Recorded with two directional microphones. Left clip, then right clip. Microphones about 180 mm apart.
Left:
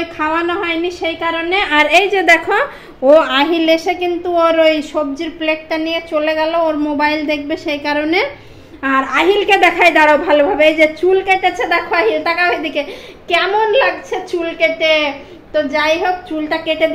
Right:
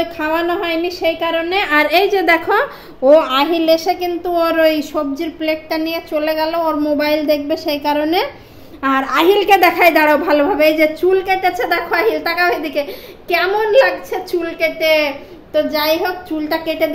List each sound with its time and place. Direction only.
0.2 s a woman's voice: centre (ahead or behind)
1.6 s a woman's voice: 10° right (ahead or behind)